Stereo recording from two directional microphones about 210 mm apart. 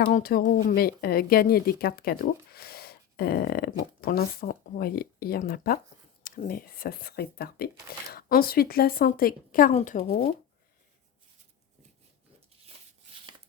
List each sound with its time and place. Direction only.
0.0 s speech: 45° left (ahead or behind)